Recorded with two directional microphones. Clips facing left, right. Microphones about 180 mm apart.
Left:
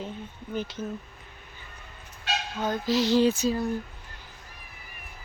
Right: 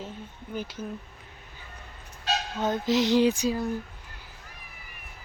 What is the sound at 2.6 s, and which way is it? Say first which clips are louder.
Speech: right 1 dB; 20° right (ahead or behind).